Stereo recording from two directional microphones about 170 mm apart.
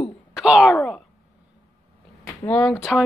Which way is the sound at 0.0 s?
5° right (ahead or behind).